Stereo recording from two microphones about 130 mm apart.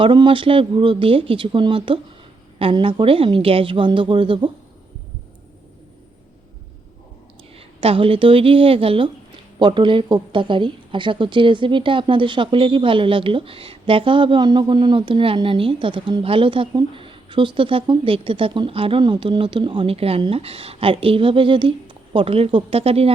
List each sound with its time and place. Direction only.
0.0 s a woman's voice: 40° right (ahead or behind)
7.5 s speech: 45° right (ahead or behind)